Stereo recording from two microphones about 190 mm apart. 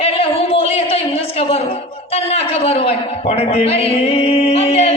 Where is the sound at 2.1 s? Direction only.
30° left (ahead or behind).